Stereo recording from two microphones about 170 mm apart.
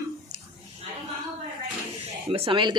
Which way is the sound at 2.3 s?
30° right (ahead or behind).